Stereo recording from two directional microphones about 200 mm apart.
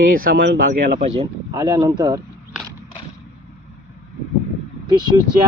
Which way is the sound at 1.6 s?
20° right (ahead or behind).